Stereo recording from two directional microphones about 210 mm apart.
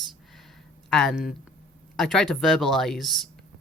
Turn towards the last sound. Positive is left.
turn(degrees=0)  # may be behind; listen again after turning